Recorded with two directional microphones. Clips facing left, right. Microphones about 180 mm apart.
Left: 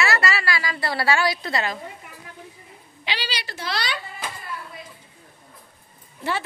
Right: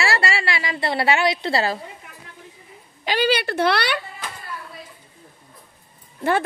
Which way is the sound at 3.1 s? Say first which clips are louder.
Right 11 dB; 50° right (ahead or behind).